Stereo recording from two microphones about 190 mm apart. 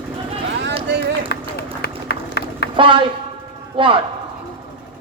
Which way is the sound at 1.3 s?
55° left (ahead or behind).